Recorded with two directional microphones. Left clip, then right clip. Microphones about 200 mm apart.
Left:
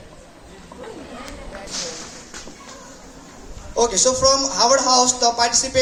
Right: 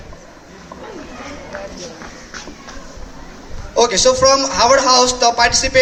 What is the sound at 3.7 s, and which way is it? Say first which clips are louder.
A man's voice: right 5 dB; 20° right (ahead or behind).